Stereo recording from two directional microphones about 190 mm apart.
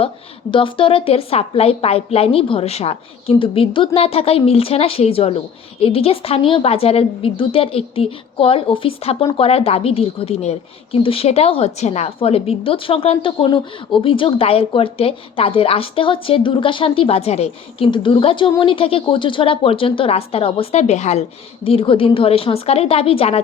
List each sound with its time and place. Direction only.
0.5 s a woman's voice: 25° left (ahead or behind)